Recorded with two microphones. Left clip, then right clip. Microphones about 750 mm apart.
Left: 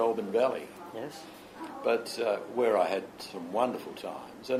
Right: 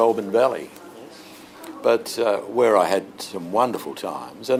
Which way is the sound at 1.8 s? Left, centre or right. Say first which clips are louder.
Right 9 dB; right.